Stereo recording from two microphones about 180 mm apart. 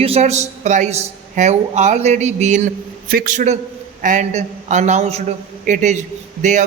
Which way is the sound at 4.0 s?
45° right (ahead or behind).